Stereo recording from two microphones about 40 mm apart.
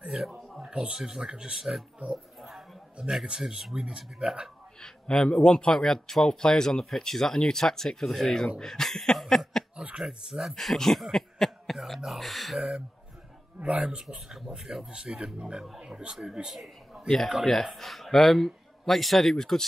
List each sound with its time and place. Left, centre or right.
0.1 s speech: centre
1.6 s speech: centre
2.4 s a sound: centre
3.3 s speech: centre
4.8 s a man's voice: centre
9.9 s speech: centre
10.5 s speech: centre
13.6 s speech: right
14.3 s speech: centre
16.4 s a man's voice: centre
17.5 s a man's voice: centre